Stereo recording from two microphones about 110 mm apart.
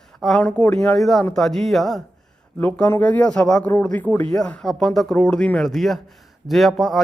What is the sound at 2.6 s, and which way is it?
Speech, 15° left (ahead or behind).